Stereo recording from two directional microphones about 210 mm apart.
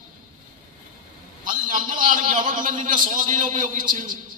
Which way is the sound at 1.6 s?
40° right (ahead or behind).